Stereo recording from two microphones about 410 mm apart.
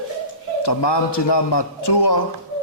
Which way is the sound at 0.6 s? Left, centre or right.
Left.